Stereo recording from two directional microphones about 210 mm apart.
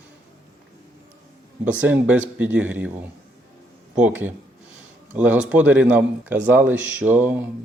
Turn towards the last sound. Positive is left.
turn(degrees=-10)  # may be behind; listen again after turning